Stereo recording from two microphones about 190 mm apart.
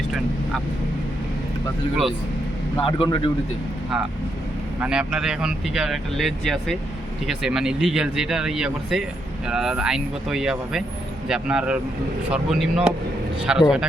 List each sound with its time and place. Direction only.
2.7 s speech: 25° left (ahead or behind)
4.8 s speech: 5° right (ahead or behind)